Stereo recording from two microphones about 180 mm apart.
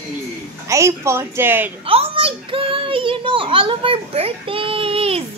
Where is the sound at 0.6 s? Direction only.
15° right (ahead or behind).